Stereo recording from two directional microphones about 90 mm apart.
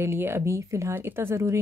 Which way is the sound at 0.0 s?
30° right (ahead or behind).